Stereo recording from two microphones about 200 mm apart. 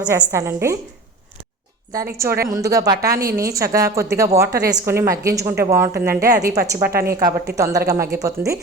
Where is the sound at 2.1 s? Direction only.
15° right (ahead or behind).